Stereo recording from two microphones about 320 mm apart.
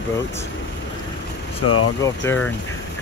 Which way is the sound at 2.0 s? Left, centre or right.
Centre.